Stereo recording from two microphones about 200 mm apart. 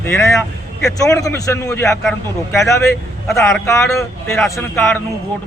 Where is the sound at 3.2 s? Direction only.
Centre (ahead or behind).